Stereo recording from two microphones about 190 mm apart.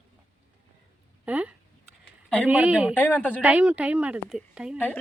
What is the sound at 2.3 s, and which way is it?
Speech, 5° right (ahead or behind).